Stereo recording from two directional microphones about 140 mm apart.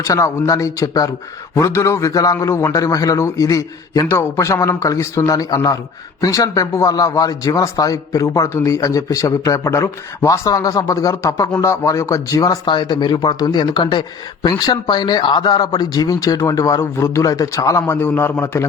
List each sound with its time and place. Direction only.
0.0 s a man's voice: 25° left (ahead or behind)